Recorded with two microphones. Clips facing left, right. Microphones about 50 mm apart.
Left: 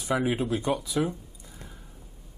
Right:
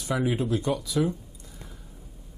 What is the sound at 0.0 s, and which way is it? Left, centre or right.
Speech, left.